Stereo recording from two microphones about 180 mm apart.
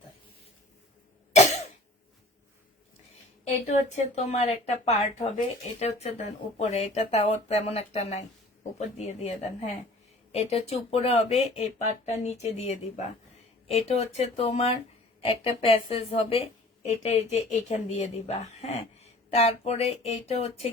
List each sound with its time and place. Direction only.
1.3 s cough: 40° left (ahead or behind)
3.7 s a woman's voice: 40° left (ahead or behind)